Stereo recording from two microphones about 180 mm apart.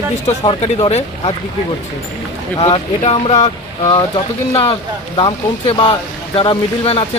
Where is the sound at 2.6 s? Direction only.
30° left (ahead or behind).